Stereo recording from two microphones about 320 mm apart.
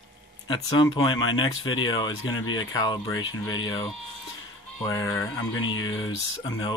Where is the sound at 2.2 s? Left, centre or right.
Left.